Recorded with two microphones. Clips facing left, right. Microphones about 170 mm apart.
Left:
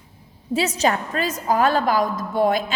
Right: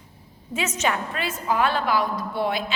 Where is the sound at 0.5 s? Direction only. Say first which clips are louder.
Left 5 dB; 35° left (ahead or behind).